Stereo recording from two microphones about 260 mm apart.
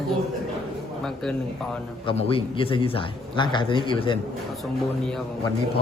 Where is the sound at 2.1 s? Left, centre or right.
Left.